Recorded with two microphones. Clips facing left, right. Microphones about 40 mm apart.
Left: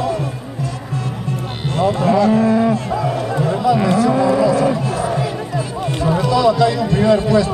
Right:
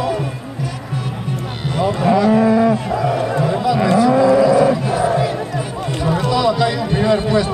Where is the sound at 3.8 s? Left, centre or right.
Right.